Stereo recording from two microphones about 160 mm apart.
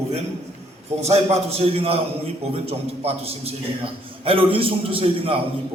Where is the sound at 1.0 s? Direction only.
40° right (ahead or behind).